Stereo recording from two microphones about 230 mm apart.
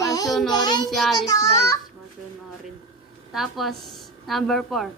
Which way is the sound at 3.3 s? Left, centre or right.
Centre.